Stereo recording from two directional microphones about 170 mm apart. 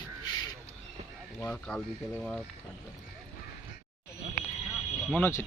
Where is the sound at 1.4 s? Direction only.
5° left (ahead or behind).